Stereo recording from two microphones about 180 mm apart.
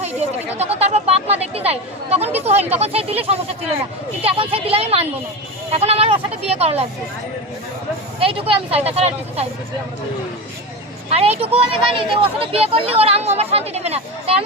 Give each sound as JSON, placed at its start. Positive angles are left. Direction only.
{"t": 0.0, "sound": "speech", "side_deg": -35}
{"t": 8.2, "sound": "speech", "side_deg": -30}
{"t": 11.1, "sound": "speech", "side_deg": -35}